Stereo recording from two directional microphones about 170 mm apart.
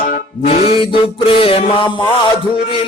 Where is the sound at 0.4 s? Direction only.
35° left (ahead or behind).